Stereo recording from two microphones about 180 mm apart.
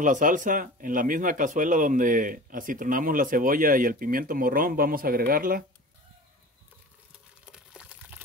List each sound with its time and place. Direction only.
0.0 s a man's voice: 45° right (ahead or behind)
7.5 s liquid: 5° right (ahead or behind)